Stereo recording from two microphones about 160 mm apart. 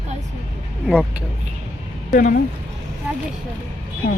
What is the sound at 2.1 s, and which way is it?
Speech, 60° left (ahead or behind).